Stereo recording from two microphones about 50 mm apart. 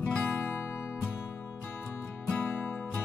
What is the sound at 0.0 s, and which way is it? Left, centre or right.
Music, left.